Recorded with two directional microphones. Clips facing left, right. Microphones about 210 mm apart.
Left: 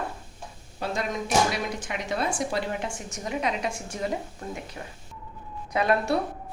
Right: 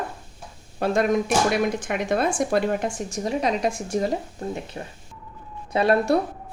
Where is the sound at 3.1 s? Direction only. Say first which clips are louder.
Right 4 dB; 35° right (ahead or behind).